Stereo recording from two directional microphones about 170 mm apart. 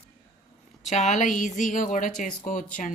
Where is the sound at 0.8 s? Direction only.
45° left (ahead or behind).